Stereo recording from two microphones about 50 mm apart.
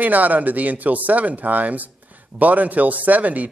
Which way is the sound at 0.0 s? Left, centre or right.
Right.